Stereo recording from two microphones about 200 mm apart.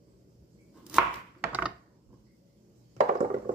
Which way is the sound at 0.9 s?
5° right (ahead or behind).